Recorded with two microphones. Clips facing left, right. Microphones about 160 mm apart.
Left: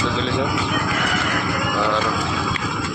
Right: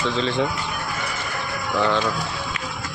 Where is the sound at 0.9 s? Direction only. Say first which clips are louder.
Left 7 dB; 90° left.